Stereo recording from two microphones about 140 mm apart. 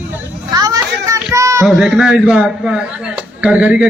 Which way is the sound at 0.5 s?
25° right (ahead or behind).